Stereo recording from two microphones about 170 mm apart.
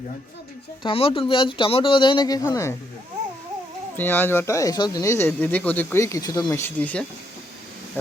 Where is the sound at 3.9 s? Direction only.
10° left (ahead or behind).